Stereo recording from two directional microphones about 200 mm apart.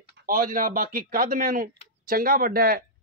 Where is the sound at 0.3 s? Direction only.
45° right (ahead or behind).